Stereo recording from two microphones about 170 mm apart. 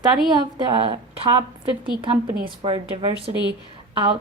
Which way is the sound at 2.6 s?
30° right (ahead or behind).